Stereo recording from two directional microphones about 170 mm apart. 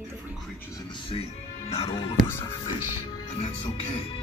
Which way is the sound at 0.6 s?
20° left (ahead or behind).